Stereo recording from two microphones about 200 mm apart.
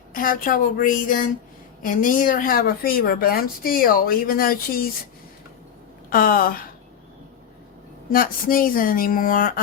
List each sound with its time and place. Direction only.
0.1 s speech: 45° left (ahead or behind)
6.1 s speech: 45° left (ahead or behind)
8.1 s speech: 45° left (ahead or behind)